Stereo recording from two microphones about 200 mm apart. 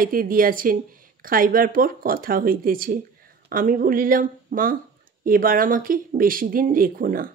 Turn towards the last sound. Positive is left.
turn(degrees=-45)  # may be behind; listen again after turning